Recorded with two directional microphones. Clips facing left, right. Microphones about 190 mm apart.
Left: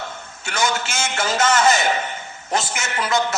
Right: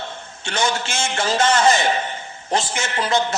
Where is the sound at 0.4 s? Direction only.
30° right (ahead or behind).